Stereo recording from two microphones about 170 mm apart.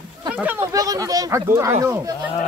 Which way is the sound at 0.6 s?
20° right (ahead or behind).